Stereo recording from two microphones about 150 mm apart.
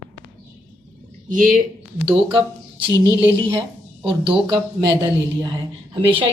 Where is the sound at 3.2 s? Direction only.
20° right (ahead or behind).